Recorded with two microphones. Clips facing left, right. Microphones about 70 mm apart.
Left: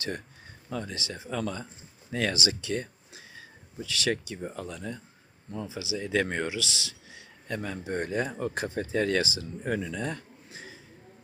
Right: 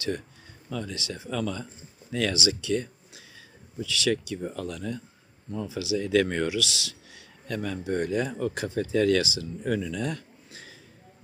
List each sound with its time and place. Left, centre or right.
0.7 s speech: left
4.4 s speech: centre